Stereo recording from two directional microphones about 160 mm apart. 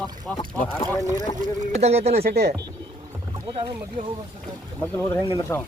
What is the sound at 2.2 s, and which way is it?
Speech, 80° right.